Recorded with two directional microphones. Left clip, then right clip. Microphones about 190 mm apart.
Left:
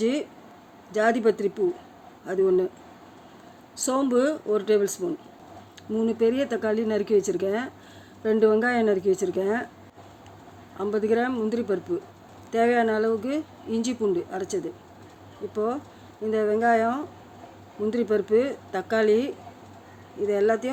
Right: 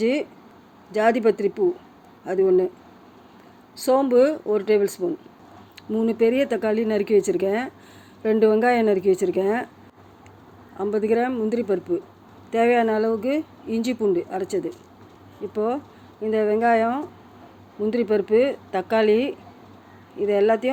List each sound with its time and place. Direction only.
0.0 s speech: 10° right (ahead or behind)
3.8 s speech: 5° right (ahead or behind)
10.8 s speech: 10° right (ahead or behind)